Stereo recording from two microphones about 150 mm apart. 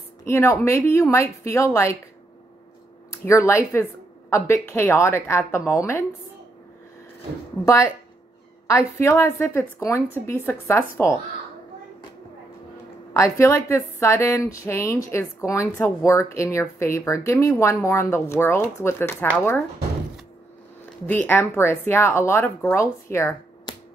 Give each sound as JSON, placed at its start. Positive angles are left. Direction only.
{"t": 0.3, "sound": "a woman's voice", "side_deg": 15}
{"t": 3.3, "sound": "a woman's voice", "side_deg": 20}
{"t": 7.6, "sound": "a woman's voice", "side_deg": 20}
{"t": 13.1, "sound": "a woman's voice", "side_deg": 20}
{"t": 21.1, "sound": "a woman's voice", "side_deg": 10}